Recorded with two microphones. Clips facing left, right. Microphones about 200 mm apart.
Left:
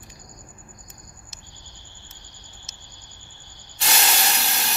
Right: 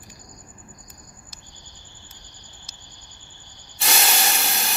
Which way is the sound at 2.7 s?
25° left (ahead or behind).